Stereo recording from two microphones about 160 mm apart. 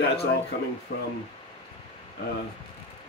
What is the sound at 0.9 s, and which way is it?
Speech, 60° left (ahead or behind).